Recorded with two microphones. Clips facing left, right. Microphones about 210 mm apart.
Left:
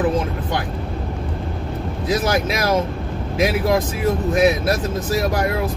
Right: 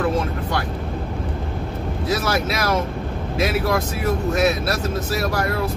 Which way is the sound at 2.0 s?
15° left (ahead or behind).